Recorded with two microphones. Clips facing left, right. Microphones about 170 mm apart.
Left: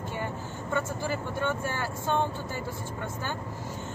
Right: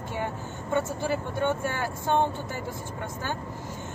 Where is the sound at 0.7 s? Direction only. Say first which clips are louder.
Right 4 dB; 15° right (ahead or behind).